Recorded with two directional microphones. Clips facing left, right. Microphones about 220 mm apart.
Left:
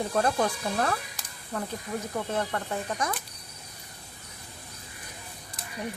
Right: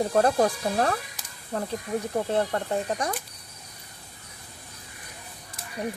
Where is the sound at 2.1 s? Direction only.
35° right (ahead or behind).